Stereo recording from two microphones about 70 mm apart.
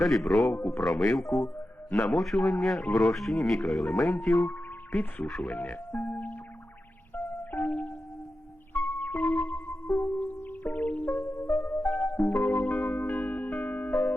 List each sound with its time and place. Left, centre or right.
0.0 s speech: centre
4.9 s speech: left
5.2 s speech: centre
5.5 s speech: left
5.9 s music: left
7.2 s music: left
11.8 s music: left
12.5 s singing bowl: left
13.1 s music: left